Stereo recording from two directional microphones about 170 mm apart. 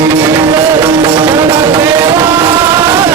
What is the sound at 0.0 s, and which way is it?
Music, 20° right (ahead or behind).